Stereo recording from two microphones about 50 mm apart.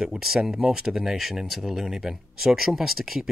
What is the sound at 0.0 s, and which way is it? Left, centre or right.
Speech, centre.